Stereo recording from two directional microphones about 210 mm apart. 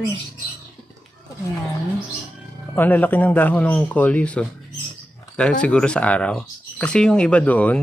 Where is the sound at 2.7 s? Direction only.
10° left (ahead or behind).